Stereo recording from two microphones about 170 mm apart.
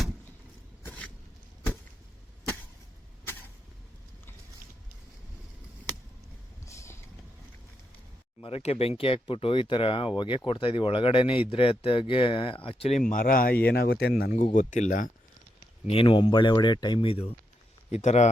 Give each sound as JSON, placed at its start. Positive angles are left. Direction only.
{"t": 0.8, "sound": "a sound", "side_deg": 10}
{"t": 6.7, "sound": "vehicle", "side_deg": 20}
{"t": 8.4, "sound": "speech", "side_deg": 35}
{"t": 13.0, "sound": "speech", "side_deg": 55}
{"t": 13.7, "sound": "speech", "side_deg": 70}
{"t": 14.5, "sound": "speech", "side_deg": 45}
{"t": 15.9, "sound": "speech", "side_deg": 30}